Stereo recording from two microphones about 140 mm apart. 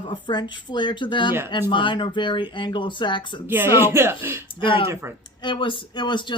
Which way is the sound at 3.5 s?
15° right (ahead or behind).